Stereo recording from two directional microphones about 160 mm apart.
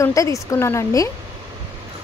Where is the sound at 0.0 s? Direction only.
20° left (ahead or behind).